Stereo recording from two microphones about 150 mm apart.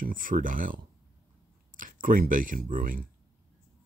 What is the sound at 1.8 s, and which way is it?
Speech, 65° right (ahead or behind).